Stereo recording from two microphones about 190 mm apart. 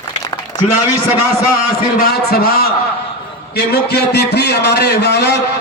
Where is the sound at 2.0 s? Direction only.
55° left (ahead or behind).